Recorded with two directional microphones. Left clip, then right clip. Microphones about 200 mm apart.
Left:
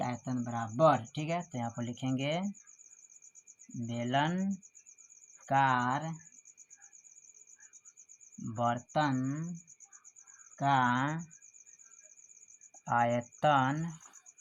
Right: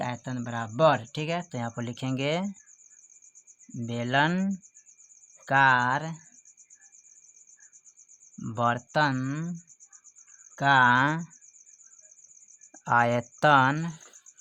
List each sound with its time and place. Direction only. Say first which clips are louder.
0.0 s speech: right 3 dB; 55° right (ahead or behind)
3.8 s speech: right 7 dB; 50° right (ahead or behind)
8.4 s speech: right 6 dB; 50° right (ahead or behind)
10.6 s speech: right 8 dB; 50° right (ahead or behind)
12.8 s speech: right 6 dB; 45° right (ahead or behind)